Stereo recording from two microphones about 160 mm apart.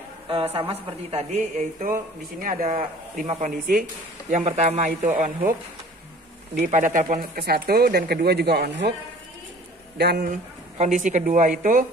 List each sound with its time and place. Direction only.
0.3 s speech: 35° right (ahead or behind); by 3.8 s 60° right (ahead or behind)
4.3 s speech: 40° right (ahead or behind); by 8.9 s 90° right
9.9 s a man's voice: 85° right
10.8 s speech: 50° right (ahead or behind)